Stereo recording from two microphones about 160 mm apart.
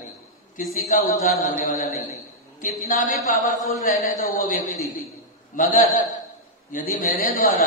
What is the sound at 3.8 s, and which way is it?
A man's voice, 65° left (ahead or behind).